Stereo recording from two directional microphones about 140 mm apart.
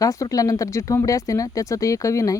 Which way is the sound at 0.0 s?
25° left (ahead or behind).